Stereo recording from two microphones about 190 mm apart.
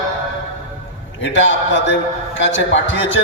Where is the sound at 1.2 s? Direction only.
80° left.